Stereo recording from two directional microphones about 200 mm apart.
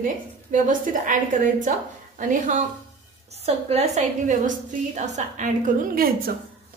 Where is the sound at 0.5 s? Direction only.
40° right (ahead or behind).